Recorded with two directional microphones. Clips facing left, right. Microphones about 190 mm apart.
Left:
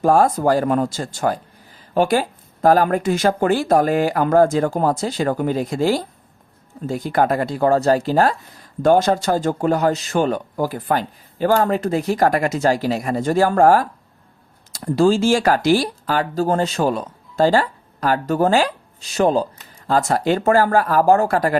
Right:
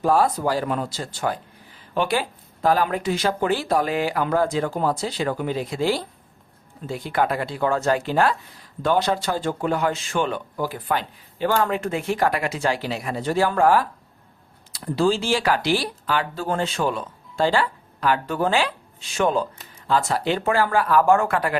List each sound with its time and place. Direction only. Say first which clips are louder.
0.0 s speech: left 4 dB; 45° left (ahead or behind)
19.9 s speech: left 4 dB; 45° left (ahead or behind)